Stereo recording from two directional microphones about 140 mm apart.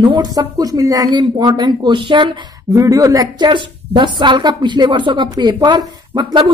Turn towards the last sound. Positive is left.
turn(degrees=-30)  # may be behind; listen again after turning